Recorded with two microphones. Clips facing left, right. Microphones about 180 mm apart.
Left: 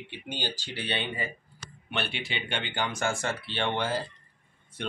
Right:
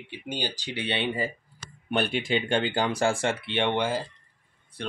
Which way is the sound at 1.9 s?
45° right (ahead or behind).